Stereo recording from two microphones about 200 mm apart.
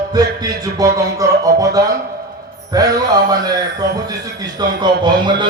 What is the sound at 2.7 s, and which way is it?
A man's voice, 20° right (ahead or behind).